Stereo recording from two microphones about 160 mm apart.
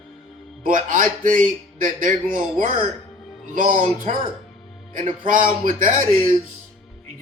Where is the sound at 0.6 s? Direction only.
55° right (ahead or behind).